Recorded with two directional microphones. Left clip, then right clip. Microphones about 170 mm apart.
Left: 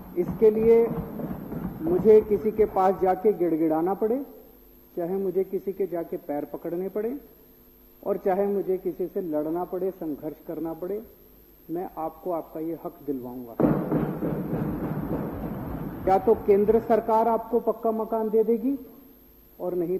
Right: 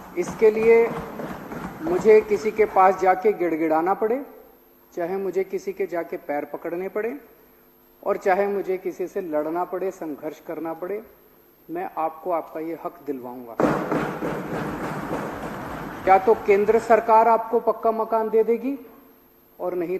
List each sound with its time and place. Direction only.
0.0 s a man's voice: 20° right (ahead or behind)